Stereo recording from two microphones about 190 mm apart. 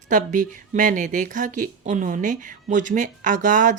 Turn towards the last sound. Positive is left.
turn(degrees=-40)  # may be behind; listen again after turning